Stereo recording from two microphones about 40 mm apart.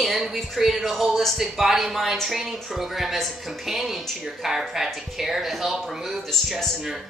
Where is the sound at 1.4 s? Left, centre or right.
Centre.